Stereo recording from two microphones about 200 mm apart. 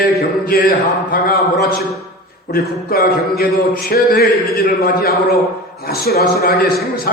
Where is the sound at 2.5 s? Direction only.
50° left (ahead or behind).